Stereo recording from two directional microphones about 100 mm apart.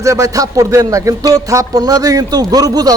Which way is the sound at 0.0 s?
30° right (ahead or behind).